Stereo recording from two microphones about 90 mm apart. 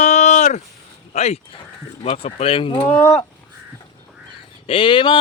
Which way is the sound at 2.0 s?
90° left.